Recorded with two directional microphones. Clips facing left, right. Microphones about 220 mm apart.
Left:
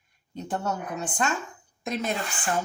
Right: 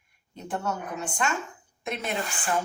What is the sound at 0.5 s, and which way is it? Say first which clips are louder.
Speech: left 1 dB; 35° left (ahead or behind).